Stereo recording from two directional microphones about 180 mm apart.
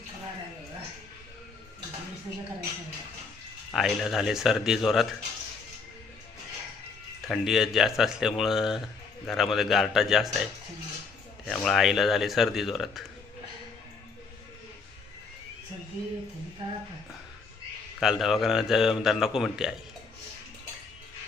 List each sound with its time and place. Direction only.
3.7 s speech: centre (ahead or behind)
7.3 s speech: centre (ahead or behind)
18.0 s speech: centre (ahead or behind)